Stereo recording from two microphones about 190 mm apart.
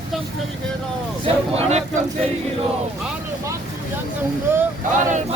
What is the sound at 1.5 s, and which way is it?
Speech, 35° right (ahead or behind).